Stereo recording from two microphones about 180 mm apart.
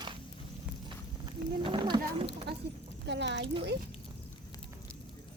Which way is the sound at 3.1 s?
70° right (ahead or behind).